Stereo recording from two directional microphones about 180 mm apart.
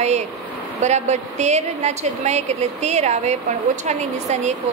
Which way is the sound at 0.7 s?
40° right (ahead or behind).